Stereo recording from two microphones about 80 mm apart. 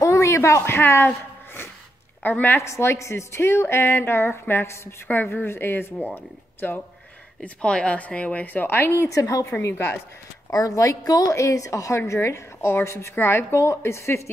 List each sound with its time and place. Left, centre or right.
0.0 s a sound: left
2.2 s a woman's voice: left
2.6 s a woman's voice: left
7.4 s a woman's voice: centre; by 9.5 s left
9.6 s a woman's voice: left
10.5 s a woman's voice: left